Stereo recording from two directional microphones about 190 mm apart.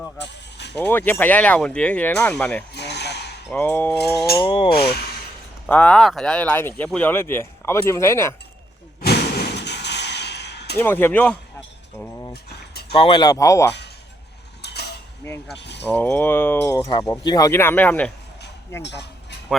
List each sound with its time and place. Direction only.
0.2 s a sound: 65° left (ahead or behind)
0.8 s speech: 10° left (ahead or behind)
2.7 s a sound: 60° left (ahead or behind)
3.5 s speech: 10° left (ahead or behind)
4.4 s speech: 25° left (ahead or behind)
5.6 s speech: 5° left (ahead or behind)
9.0 s a sound: 55° left (ahead or behind)
10.8 s speech: 10° left (ahead or behind)
12.3 s a sound: 55° left (ahead or behind)
12.9 s speech: 30° left (ahead or behind)
14.6 s cutlery: 60° left (ahead or behind)
15.5 s speech: 65° left (ahead or behind)
15.9 s speech: 10° left (ahead or behind)
18.8 s speech: 65° left (ahead or behind)